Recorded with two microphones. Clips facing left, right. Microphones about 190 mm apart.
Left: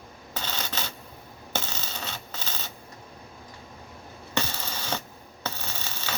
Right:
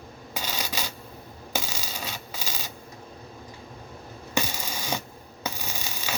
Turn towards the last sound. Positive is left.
turn(degrees=-10)  # may be behind; listen again after turning